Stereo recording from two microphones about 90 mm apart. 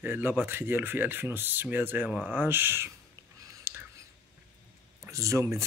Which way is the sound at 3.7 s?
25° right (ahead or behind).